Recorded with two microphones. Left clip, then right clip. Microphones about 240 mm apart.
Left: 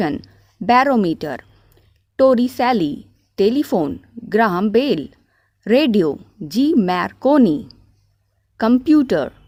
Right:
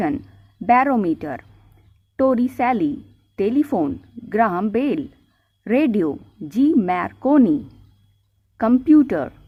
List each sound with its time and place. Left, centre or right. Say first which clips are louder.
0.6 s speech: left 2 dB; left